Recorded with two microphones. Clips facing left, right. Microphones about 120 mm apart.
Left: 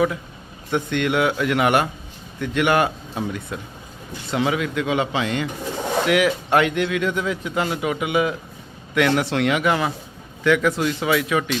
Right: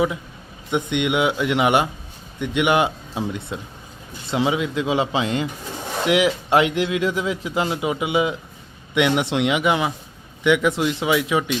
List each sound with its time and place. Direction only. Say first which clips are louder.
0.7 s a man's voice: even; 15° right (ahead or behind)